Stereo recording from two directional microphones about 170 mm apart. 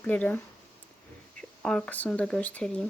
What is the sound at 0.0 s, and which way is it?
Speech, 10° left (ahead or behind).